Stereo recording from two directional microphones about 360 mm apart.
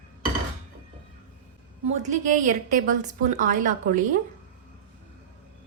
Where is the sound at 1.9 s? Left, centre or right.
Centre.